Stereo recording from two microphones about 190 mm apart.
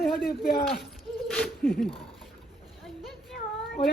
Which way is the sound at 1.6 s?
50° left (ahead or behind).